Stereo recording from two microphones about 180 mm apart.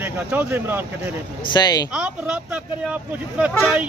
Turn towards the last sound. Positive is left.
turn(degrees=0)  # may be behind; listen again after turning